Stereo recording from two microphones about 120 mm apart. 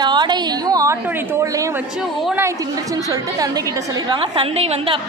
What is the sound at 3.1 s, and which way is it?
Speech, 30° right (ahead or behind).